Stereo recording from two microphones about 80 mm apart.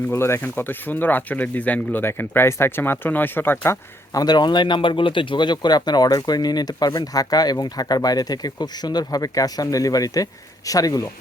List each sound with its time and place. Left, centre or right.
0.1 s speech: left
4.1 s speech: left